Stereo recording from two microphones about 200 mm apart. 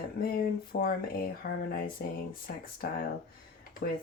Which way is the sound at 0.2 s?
50° left (ahead or behind).